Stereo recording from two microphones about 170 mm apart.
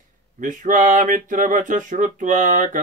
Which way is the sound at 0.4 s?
50° right (ahead or behind).